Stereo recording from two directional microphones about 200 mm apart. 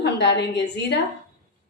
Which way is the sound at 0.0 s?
60° left (ahead or behind).